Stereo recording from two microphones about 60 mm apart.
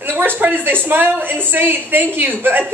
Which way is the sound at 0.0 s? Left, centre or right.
Right.